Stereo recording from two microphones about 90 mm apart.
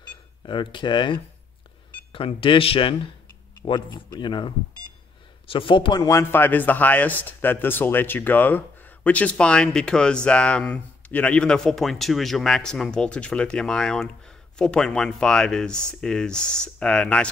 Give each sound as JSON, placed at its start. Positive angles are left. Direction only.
{"t": 0.5, "sound": "speech", "side_deg": 65}
{"t": 2.1, "sound": "speech", "side_deg": 75}
{"t": 3.6, "sound": "speech", "side_deg": 60}
{"t": 5.5, "sound": "speech", "side_deg": 70}
{"t": 5.9, "sound": "speech", "side_deg": 35}
{"t": 6.3, "sound": "speech", "side_deg": 20}